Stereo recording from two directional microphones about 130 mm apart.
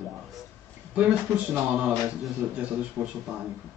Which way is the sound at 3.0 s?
20° right (ahead or behind).